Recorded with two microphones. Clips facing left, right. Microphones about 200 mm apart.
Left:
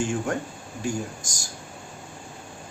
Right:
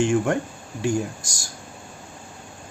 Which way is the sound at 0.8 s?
75° right (ahead or behind).